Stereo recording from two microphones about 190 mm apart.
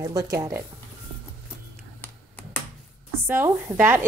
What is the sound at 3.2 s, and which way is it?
Speech, 15° right (ahead or behind).